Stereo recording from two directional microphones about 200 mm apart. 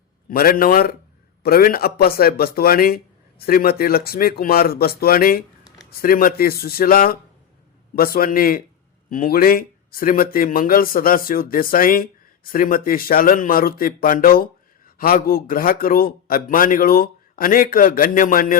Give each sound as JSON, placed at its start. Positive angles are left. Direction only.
{"t": 0.3, "sound": "speech", "side_deg": 45}